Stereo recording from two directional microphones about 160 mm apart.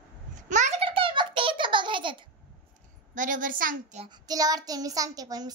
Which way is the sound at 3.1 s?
55° right (ahead or behind).